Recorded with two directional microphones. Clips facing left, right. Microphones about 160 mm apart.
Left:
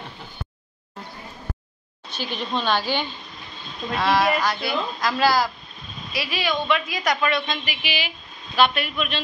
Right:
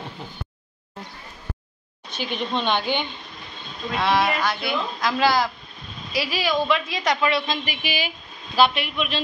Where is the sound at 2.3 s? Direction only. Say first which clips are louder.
Even; 20° right (ahead or behind).